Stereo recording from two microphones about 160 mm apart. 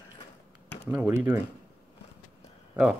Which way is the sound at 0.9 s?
10° right (ahead or behind).